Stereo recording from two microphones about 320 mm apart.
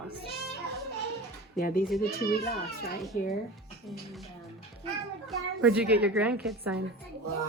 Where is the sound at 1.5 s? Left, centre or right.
Left.